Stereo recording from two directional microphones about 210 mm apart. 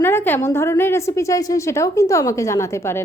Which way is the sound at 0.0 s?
10° left (ahead or behind).